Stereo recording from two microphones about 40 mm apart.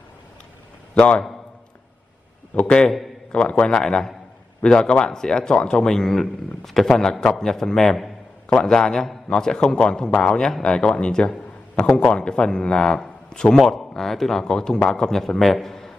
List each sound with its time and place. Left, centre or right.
0.9 s a man's voice: left
2.5 s a man's voice: left; by 13.6 s centre
13.6 s a man's voice: centre